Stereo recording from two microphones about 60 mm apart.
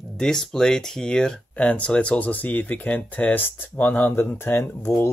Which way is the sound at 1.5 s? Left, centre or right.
Left.